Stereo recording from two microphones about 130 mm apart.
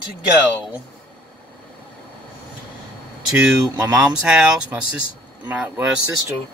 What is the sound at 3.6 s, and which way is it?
Speech, 25° right (ahead or behind).